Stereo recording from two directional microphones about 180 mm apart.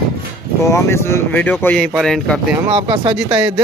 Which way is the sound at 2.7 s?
30° right (ahead or behind).